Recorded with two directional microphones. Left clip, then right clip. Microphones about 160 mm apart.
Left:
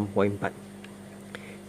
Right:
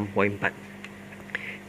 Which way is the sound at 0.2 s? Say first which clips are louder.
Right 2 dB; 25° left (ahead or behind).